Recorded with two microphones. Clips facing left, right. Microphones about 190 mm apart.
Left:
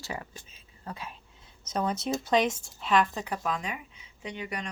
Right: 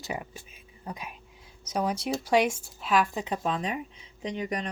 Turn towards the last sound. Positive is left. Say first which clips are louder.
# right 5 dB
turn(degrees=-35)  # may be behind; listen again after turning